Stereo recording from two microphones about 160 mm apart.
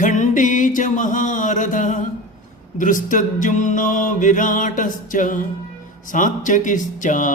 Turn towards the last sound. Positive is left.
turn(degrees=55)  # may be behind; listen again after turning